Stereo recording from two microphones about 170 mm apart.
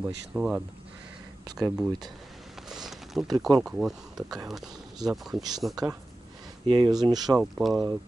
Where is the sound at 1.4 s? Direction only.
25° right (ahead or behind).